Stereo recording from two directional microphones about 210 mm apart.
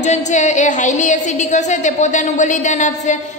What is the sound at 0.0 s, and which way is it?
A woman's voice, 35° left (ahead or behind).